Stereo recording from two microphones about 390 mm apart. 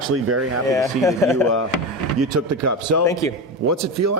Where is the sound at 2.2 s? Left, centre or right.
Right.